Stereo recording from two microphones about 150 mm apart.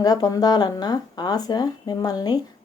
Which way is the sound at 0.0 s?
25° left (ahead or behind).